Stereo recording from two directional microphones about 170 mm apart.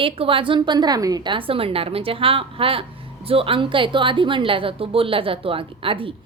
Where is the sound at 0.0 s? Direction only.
30° right (ahead or behind).